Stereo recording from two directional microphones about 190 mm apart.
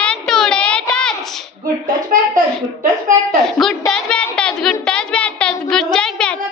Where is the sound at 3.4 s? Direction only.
Centre (ahead or behind).